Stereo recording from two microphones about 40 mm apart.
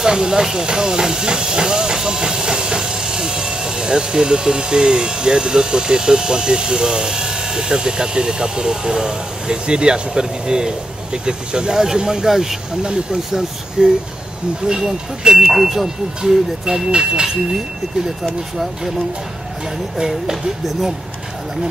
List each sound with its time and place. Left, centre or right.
0.0 s speech: centre
12.8 s speech: right
20.1 s speech: centre